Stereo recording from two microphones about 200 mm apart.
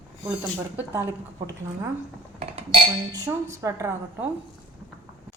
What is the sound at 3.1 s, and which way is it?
A woman's voice, 15° right (ahead or behind).